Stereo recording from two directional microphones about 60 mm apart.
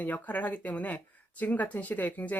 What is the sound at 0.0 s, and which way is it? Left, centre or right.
Speech, left.